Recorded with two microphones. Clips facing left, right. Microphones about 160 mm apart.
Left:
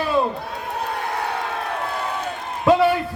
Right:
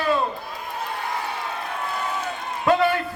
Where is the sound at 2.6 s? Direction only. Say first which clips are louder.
Left 3 dB; 5° left (ahead or behind).